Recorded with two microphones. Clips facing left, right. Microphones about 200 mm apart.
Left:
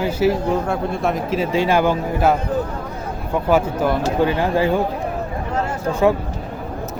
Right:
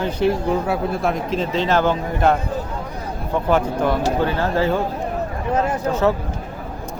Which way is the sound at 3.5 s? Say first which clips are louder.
Left 1 dB; 5° left (ahead or behind).